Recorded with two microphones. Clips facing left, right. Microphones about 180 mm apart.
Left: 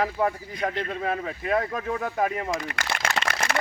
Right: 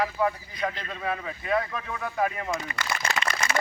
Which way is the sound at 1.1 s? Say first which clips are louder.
Even; 45° left (ahead or behind).